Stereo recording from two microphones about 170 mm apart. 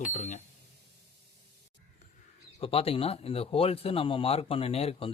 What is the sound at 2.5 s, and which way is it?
Speech, 35° left (ahead or behind).